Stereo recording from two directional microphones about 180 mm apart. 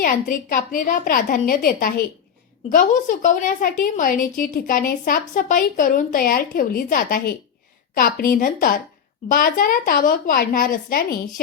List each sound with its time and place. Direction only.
0.0 s a woman's voice: 50° left (ahead or behind)